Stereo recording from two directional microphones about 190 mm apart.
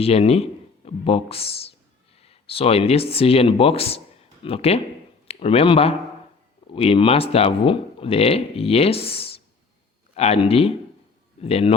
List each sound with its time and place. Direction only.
0.0 s a man's voice: 30° left (ahead or behind)